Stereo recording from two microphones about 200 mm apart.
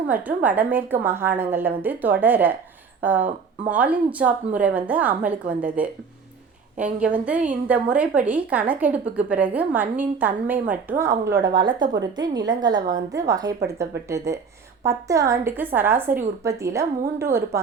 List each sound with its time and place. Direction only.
0.1 s a woman's voice: 10° right (ahead or behind)
11.4 s a woman's voice: 20° right (ahead or behind)